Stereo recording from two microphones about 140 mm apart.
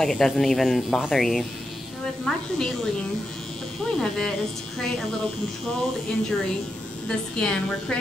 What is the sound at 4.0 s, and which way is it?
Speech, 5° left (ahead or behind).